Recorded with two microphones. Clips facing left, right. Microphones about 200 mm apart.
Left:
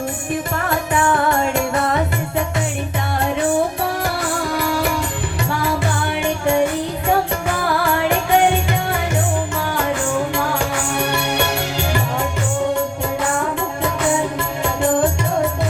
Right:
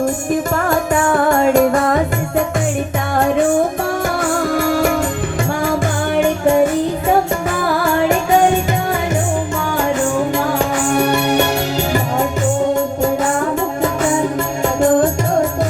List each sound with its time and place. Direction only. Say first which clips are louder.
0.5 s music: right 4 dB; 45° right (ahead or behind)
4.4 s music: right 5 dB; 50° right (ahead or behind)
6.1 s music: right 9 dB; 45° right (ahead or behind)
10.9 s music: right 7 dB; 40° right (ahead or behind)